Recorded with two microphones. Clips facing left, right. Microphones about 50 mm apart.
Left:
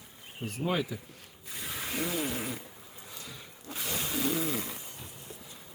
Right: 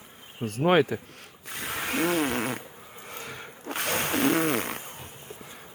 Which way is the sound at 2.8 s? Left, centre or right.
Right.